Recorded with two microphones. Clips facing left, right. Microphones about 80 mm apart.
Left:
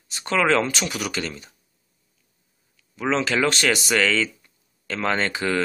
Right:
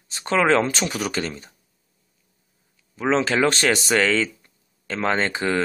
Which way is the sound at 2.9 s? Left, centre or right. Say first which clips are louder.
Right 2 dB; right.